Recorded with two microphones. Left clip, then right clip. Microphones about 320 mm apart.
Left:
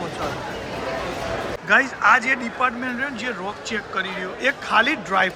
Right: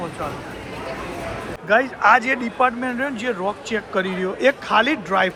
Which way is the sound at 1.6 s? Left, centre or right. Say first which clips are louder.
Right 1 dB; centre.